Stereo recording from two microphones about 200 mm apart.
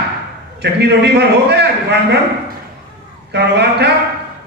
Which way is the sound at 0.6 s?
55° right (ahead or behind).